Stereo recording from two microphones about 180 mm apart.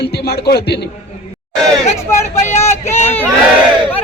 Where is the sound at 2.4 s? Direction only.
40° left (ahead or behind).